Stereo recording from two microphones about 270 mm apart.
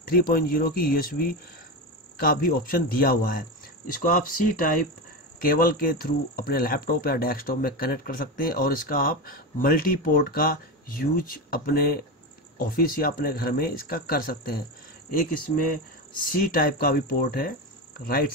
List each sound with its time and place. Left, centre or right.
0.0 s speech: left